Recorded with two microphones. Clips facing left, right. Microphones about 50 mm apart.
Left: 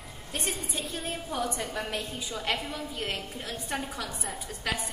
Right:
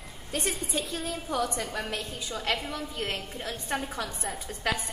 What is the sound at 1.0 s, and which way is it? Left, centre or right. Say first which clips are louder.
Speech: even; left.